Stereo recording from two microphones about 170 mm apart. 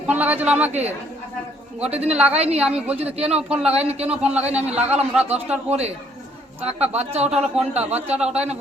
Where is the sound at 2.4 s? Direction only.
35° right (ahead or behind).